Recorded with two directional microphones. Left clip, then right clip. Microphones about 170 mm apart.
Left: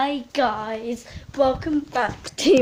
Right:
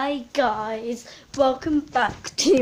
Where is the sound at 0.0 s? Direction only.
Centre (ahead or behind).